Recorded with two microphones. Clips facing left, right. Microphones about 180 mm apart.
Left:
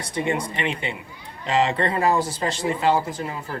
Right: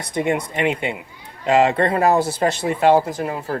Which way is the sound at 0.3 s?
55° right (ahead or behind).